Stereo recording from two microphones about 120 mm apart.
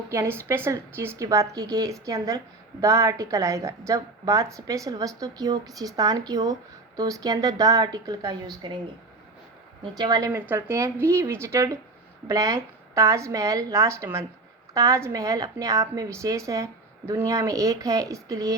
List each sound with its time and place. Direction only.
0.1 s a woman's voice: 20° right (ahead or behind)
9.8 s a woman's voice: 35° right (ahead or behind)